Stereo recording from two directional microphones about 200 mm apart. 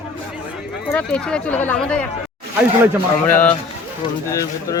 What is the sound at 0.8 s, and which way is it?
Speech, 5° left (ahead or behind).